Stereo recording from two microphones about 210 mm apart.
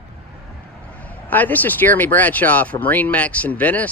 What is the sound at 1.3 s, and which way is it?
Speech, 10° left (ahead or behind).